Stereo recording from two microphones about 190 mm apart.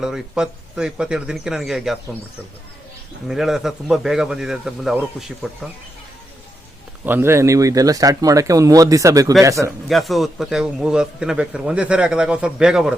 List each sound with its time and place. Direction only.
0.0 s a man's voice: 5° right (ahead or behind)
3.2 s a man's voice: centre (ahead or behind)
7.0 s speech: 10° right (ahead or behind)
9.9 s a man's voice: centre (ahead or behind)